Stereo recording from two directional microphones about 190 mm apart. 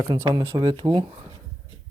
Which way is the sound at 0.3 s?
20° right (ahead or behind).